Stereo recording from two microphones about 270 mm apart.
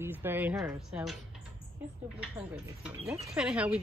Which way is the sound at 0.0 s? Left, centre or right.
Centre.